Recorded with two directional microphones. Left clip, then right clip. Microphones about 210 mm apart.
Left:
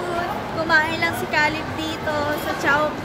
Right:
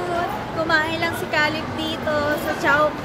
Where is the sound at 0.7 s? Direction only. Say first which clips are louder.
Left 2 dB; 5° left (ahead or behind).